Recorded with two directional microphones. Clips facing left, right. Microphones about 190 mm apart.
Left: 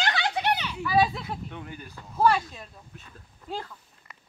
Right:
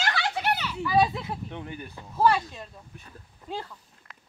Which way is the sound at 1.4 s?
25° right (ahead or behind).